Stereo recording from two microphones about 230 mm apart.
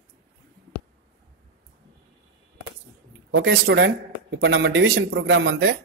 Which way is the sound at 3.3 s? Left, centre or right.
Right.